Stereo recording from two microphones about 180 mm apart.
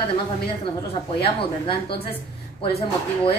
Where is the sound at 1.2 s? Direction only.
30° left (ahead or behind).